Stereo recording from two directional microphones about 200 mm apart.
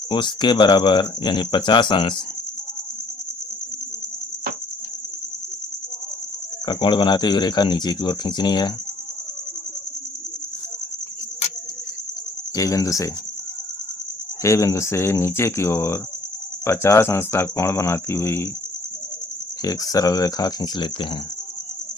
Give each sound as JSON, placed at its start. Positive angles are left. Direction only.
{"t": 0.1, "sound": "speech", "side_deg": 25}
{"t": 6.7, "sound": "speech", "side_deg": 25}
{"t": 12.5, "sound": "speech", "side_deg": 15}
{"t": 14.4, "sound": "speech", "side_deg": 15}
{"t": 19.6, "sound": "speech", "side_deg": 20}